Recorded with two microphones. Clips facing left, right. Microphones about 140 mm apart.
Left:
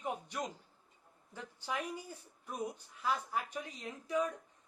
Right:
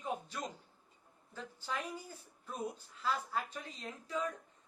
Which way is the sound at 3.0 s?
15° left (ahead or behind).